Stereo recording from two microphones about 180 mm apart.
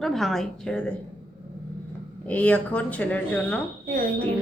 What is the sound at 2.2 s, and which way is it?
Speech, 10° left (ahead or behind).